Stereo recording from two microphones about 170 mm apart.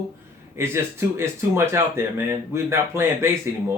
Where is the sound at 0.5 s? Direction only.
15° right (ahead or behind).